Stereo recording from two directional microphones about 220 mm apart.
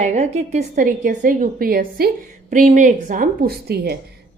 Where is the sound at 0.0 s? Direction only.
30° right (ahead or behind).